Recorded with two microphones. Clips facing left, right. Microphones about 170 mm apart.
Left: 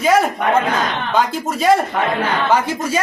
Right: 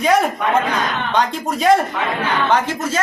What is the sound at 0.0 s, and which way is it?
A woman's voice, centre (ahead or behind).